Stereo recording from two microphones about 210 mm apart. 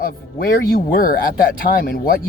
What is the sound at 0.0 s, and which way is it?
Speech, 45° left (ahead or behind).